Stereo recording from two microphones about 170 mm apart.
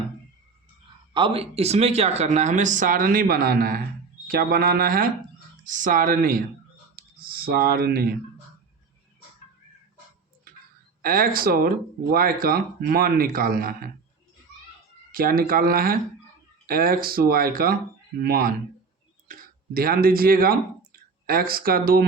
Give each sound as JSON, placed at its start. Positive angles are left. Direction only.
{"t": 1.1, "sound": "speech", "side_deg": -35}
{"t": 11.0, "sound": "speech", "side_deg": -60}
{"t": 15.1, "sound": "speech", "side_deg": -60}